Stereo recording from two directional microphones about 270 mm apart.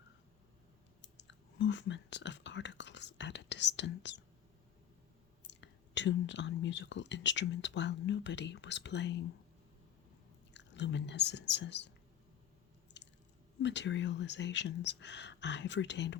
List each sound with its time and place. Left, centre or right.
1.0 s whispering: left
5.4 s speech: left
10.5 s speech: left
13.6 s speech: left